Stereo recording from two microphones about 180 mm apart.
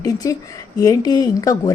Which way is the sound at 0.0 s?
20° left (ahead or behind).